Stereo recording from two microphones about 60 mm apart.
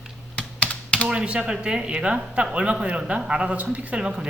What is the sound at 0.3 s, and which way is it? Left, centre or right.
Computer keyboard, left.